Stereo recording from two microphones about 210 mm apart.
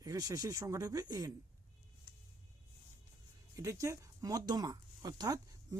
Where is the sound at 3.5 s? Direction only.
15° right (ahead or behind).